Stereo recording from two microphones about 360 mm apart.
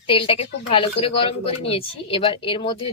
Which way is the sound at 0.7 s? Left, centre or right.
Centre.